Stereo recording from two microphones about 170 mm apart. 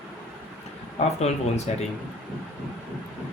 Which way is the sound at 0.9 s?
40° left (ahead or behind).